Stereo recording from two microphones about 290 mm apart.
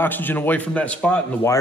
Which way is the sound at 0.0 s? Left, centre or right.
Centre.